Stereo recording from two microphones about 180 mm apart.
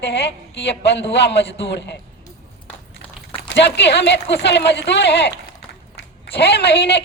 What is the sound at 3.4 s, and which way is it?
A woman's voice, 75° left (ahead or behind).